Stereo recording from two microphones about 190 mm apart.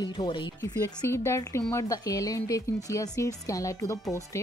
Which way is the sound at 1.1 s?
15° left (ahead or behind).